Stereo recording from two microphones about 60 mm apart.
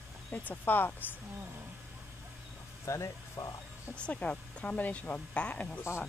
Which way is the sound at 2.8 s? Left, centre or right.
Left.